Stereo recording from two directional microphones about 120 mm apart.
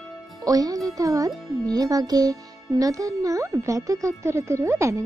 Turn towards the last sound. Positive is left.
turn(degrees=-25)  # may be behind; listen again after turning